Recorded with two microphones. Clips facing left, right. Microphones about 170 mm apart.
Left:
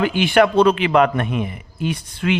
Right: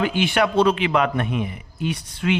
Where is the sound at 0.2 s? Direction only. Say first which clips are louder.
Left 5 dB; 55° left (ahead or behind).